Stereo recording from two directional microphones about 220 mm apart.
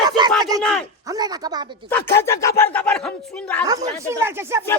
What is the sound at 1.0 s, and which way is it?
Speech, 15° right (ahead or behind).